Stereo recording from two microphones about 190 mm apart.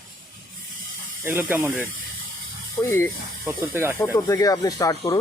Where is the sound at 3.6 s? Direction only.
10° right (ahead or behind).